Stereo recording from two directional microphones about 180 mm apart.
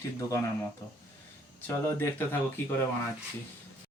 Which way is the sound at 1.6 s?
10° left (ahead or behind).